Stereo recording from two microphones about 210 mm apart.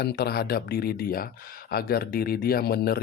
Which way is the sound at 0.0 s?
50° left (ahead or behind).